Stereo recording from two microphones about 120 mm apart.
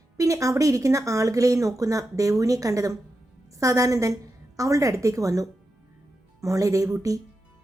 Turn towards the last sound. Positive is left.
turn(degrees=-30)  # may be behind; listen again after turning